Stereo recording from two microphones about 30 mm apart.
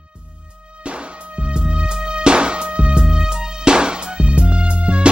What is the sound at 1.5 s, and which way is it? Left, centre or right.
Music, right.